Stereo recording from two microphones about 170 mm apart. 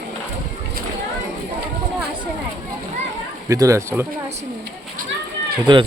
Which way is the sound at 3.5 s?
20° right (ahead or behind).